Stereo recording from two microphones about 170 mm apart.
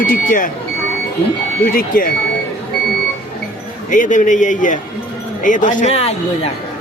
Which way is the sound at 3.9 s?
50° left (ahead or behind).